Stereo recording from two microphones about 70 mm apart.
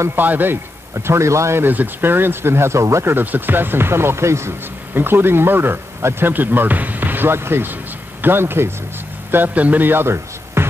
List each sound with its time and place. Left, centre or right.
0.0 s a man's voice: right
1.0 s speech: right
1.6 s a man's voice: right